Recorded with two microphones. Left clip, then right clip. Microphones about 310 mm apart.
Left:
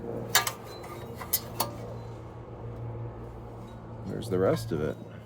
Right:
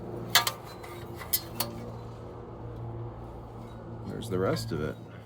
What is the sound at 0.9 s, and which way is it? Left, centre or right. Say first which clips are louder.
Tick-tock: right 1 dB; centre.